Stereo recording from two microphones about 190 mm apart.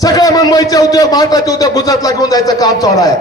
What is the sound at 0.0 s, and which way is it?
A man's voice, 20° left (ahead or behind).